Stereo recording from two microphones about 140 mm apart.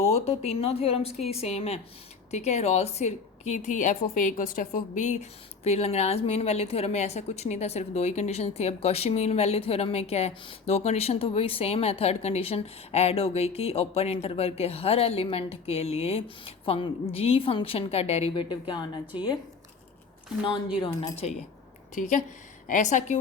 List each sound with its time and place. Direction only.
0.1 s a woman's voice: 45° left (ahead or behind)
18.4 s speech: 35° left (ahead or behind)
20.9 s speech: 25° left (ahead or behind)
21.9 s a woman's voice: 65° left (ahead or behind)